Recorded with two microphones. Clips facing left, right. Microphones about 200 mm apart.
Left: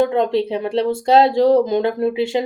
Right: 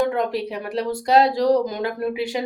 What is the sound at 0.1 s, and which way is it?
Speech, 25° left (ahead or behind).